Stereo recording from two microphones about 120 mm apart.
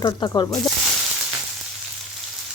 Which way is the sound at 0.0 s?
40° left (ahead or behind).